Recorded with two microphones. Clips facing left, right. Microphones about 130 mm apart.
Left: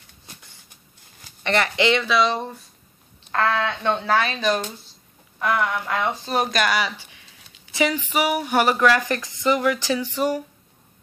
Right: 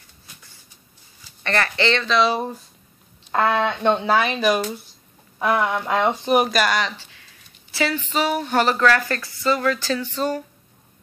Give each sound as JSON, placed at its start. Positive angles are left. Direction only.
{"t": 1.4, "sound": "speech", "side_deg": 20}
{"t": 2.1, "sound": "speech", "side_deg": -5}
{"t": 3.3, "sound": "speech", "side_deg": -15}
{"t": 5.4, "sound": "speech", "side_deg": -25}
{"t": 6.3, "sound": "speech", "side_deg": -5}
{"t": 7.0, "sound": "a sound", "side_deg": 15}
{"t": 7.7, "sound": "speech", "side_deg": 15}